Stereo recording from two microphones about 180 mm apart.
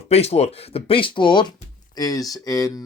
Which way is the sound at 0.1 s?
35° left (ahead or behind).